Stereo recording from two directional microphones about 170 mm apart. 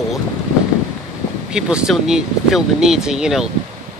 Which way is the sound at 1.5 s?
5° right (ahead or behind).